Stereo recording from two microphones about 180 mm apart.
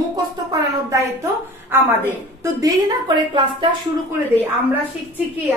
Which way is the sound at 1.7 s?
10° right (ahead or behind).